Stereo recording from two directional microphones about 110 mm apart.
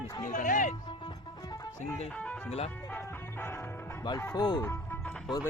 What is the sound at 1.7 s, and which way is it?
Speech, 25° left (ahead or behind).